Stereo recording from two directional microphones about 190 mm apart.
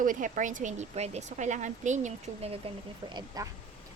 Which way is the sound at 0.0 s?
45° right (ahead or behind).